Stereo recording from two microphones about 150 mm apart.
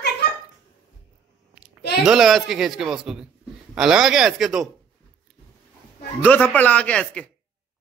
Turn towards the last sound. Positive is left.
turn(degrees=5)  # may be behind; listen again after turning